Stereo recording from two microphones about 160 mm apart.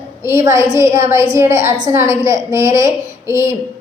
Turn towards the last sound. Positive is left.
turn(degrees=-15)  # may be behind; listen again after turning